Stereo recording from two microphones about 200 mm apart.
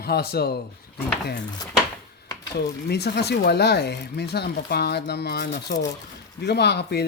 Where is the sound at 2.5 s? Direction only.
55° left (ahead or behind).